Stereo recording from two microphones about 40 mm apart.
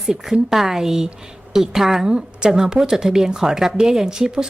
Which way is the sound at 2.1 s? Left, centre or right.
Right.